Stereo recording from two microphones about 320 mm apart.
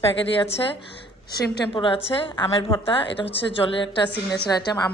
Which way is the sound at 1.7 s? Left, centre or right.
Centre.